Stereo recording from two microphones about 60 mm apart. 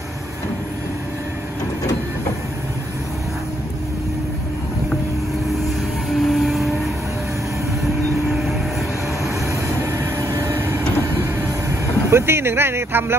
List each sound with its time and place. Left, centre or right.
6.0 s vehicle: centre
9.9 s vehicle: right
12.1 s speech: right